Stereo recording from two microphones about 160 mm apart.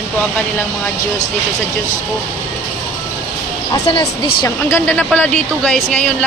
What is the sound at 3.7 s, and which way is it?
Speech, 25° left (ahead or behind).